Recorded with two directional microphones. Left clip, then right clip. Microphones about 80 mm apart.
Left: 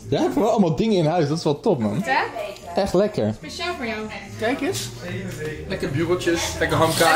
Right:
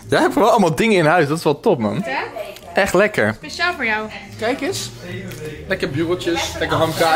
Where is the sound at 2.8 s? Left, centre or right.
Right.